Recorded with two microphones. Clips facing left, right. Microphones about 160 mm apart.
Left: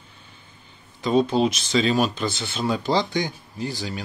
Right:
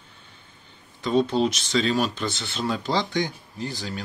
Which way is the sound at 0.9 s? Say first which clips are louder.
Left 2 dB; 5° left (ahead or behind).